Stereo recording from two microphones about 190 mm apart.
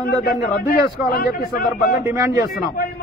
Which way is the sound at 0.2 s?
50° left (ahead or behind).